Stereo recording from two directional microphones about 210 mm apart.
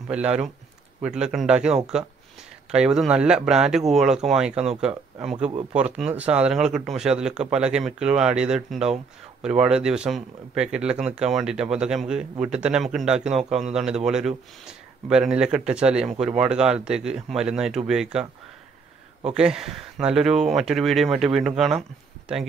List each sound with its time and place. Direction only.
0.1 s speech: 5° right (ahead or behind)
5.5 s speech: 30° right (ahead or behind)
5.8 s speech: 5° right (ahead or behind)
19.3 s speech: 5° right (ahead or behind)